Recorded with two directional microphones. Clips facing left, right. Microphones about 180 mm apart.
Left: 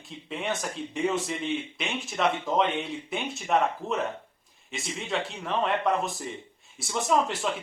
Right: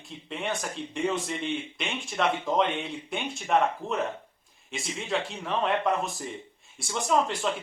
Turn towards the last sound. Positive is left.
turn(degrees=0)  # may be behind; listen again after turning